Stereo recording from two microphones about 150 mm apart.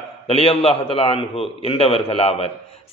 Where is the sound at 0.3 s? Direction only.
40° left (ahead or behind).